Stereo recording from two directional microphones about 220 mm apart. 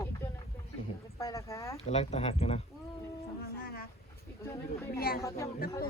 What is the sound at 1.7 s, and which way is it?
Speech, 30° left (ahead or behind).